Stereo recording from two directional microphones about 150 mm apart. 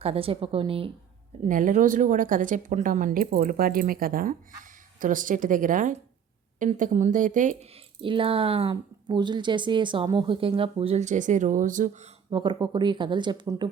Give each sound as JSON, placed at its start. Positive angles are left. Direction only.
{"t": 0.0, "sound": "speech", "side_deg": -40}
{"t": 1.5, "sound": "a woman's voice", "side_deg": -60}
{"t": 4.9, "sound": "a woman's voice", "side_deg": -60}
{"t": 8.0, "sound": "speech", "side_deg": -35}
{"t": 12.3, "sound": "speech", "side_deg": -35}